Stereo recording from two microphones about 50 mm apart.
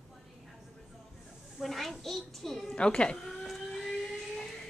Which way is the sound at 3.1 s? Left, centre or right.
Centre.